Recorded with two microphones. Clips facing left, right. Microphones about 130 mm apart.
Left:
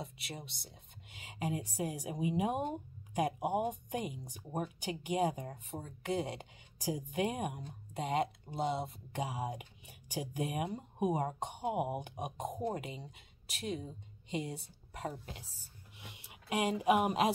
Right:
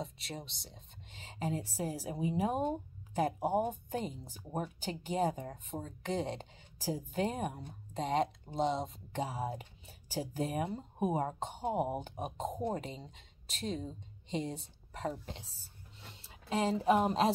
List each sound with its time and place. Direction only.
0.0 s speech: 10° left (ahead or behind)
5.7 s speech: 10° right (ahead or behind)
6.0 s speech: 10° left (ahead or behind)
16.0 s a sound: 15° left (ahead or behind)